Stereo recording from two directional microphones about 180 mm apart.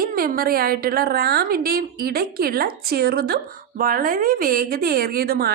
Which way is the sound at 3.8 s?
50° right (ahead or behind).